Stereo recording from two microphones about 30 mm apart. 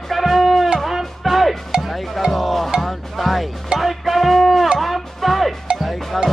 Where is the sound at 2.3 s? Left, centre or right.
Centre.